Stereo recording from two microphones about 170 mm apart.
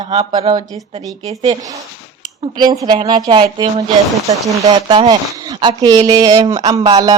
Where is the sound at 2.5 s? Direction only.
25° right (ahead or behind).